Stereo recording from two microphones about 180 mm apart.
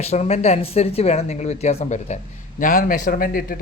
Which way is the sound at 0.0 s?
35° left (ahead or behind).